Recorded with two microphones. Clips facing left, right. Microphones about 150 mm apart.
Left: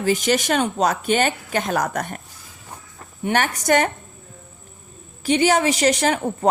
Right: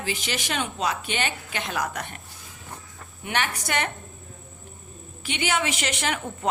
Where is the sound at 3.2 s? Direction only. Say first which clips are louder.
Left 7 dB; 40° left (ahead or behind).